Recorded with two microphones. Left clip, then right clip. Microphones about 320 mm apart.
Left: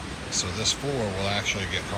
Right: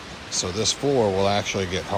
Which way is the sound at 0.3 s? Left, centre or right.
Centre.